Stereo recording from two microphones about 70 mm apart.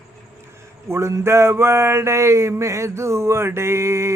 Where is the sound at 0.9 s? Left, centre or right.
Right.